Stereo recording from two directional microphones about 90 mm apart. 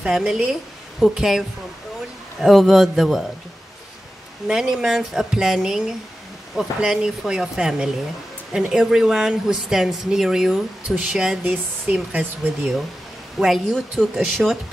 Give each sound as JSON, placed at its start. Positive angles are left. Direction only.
{"t": 0.0, "sound": "speech", "side_deg": -10}
{"t": 2.4, "sound": "speech", "side_deg": -5}
{"t": 4.5, "sound": "speech", "side_deg": -5}
{"t": 11.4, "sound": "speech", "side_deg": -15}
{"t": 13.4, "sound": "speech", "side_deg": 0}